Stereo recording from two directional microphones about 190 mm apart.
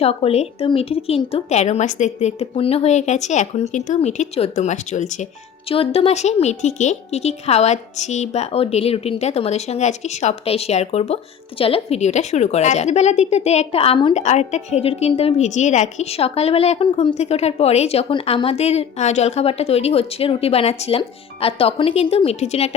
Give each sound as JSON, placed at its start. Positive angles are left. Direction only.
{"t": 0.0, "sound": "a woman's voice", "side_deg": 30}